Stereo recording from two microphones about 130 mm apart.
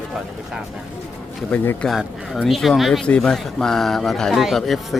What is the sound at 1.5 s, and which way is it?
Speech, 5° left (ahead or behind).